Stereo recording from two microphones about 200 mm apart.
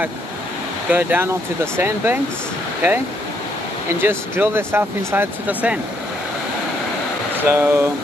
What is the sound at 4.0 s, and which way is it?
Speech, 10° right (ahead or behind).